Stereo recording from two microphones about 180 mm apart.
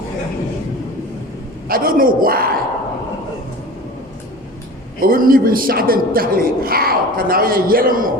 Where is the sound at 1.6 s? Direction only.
55° right (ahead or behind).